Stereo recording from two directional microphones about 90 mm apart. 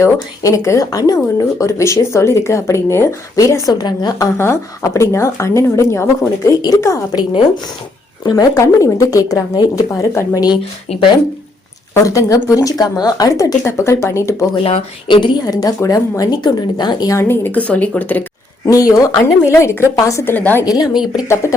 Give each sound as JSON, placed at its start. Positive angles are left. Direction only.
{"t": 0.0, "sound": "speech", "side_deg": 35}
{"t": 4.4, "sound": "speech", "side_deg": 30}
{"t": 6.5, "sound": "speech", "side_deg": 40}
{"t": 8.2, "sound": "speech", "side_deg": 45}
{"t": 12.0, "sound": "speech", "side_deg": 40}
{"t": 14.5, "sound": "speech", "side_deg": 65}
{"t": 15.8, "sound": "speech", "side_deg": 40}
{"t": 17.1, "sound": "a woman's voice", "side_deg": 30}
{"t": 18.6, "sound": "speech", "side_deg": 40}
{"t": 20.3, "sound": "a woman's voice", "side_deg": 20}
{"t": 20.7, "sound": "speech", "side_deg": 45}
{"t": 20.9, "sound": "speech", "side_deg": -5}